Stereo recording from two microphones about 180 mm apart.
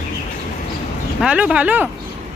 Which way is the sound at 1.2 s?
5° right (ahead or behind).